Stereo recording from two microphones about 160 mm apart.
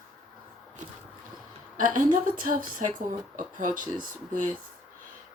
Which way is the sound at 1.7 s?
55° right (ahead or behind).